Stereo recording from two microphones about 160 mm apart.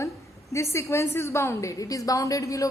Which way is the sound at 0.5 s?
15° left (ahead or behind).